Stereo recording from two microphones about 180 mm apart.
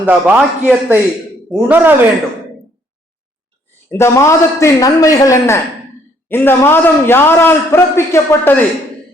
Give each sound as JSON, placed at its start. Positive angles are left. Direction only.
{"t": 0.0, "sound": "a man's voice", "side_deg": -10}
{"t": 3.9, "sound": "a man's voice", "side_deg": 15}